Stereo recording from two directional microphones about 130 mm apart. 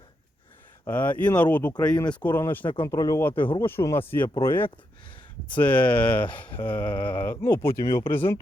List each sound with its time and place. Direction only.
0.9 s speech: 15° left (ahead or behind)
2.8 s speech: 25° left (ahead or behind)
3.3 s speech: 40° left (ahead or behind)
3.6 s speech: 20° left (ahead or behind)